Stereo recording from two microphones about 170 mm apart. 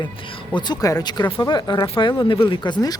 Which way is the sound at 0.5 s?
25° left (ahead or behind).